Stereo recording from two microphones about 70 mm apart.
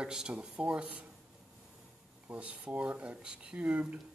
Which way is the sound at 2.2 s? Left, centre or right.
Right.